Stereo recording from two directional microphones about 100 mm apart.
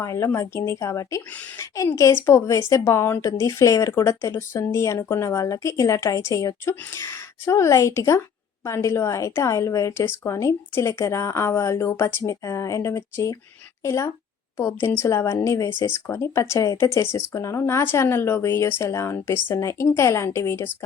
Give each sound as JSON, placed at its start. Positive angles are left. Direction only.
{"t": 0.0, "sound": "a woman's voice", "side_deg": 30}